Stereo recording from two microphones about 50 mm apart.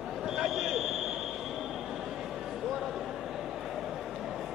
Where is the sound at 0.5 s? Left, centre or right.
Centre.